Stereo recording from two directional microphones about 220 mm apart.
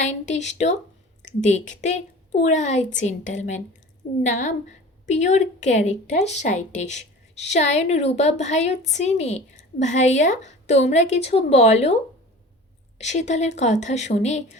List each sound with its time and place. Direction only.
0.0 s a woman's voice: 30° left (ahead or behind)
13.0 s a woman's voice: 30° left (ahead or behind)